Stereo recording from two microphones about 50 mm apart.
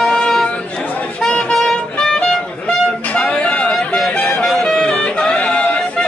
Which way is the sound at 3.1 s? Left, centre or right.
Centre.